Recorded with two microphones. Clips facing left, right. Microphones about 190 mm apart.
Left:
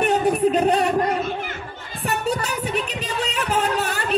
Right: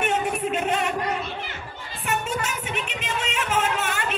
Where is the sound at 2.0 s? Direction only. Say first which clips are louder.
Left 4 dB; 35° left (ahead or behind).